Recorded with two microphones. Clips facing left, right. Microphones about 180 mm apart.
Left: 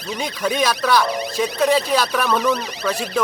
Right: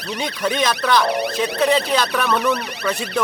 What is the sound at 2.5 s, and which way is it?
Speech, 65° right (ahead or behind).